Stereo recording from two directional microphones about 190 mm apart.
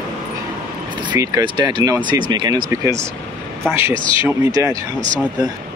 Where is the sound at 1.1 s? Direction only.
15° right (ahead or behind).